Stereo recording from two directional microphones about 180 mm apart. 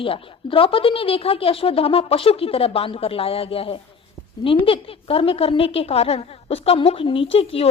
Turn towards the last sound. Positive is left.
turn(degrees=30)  # may be behind; listen again after turning